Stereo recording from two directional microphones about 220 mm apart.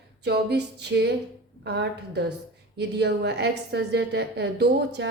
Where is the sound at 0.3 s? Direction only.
50° right (ahead or behind).